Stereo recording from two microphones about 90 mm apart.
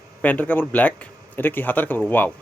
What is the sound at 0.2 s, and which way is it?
A man's voice, 20° left (ahead or behind).